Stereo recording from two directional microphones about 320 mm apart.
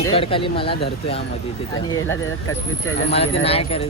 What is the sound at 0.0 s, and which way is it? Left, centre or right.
Speech, centre.